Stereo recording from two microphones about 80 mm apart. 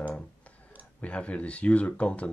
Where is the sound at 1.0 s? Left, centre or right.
Centre.